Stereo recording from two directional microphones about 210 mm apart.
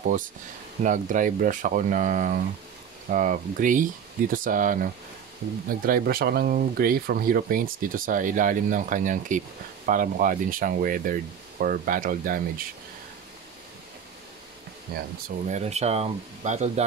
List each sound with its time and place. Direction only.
0.0 s speech: 40° right (ahead or behind)
15.2 s speech: 30° right (ahead or behind)